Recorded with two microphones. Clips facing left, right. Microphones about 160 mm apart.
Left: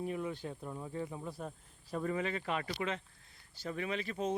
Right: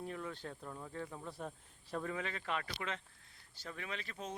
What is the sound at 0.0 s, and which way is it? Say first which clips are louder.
Speech: left 6 dB; 15° left (ahead or behind).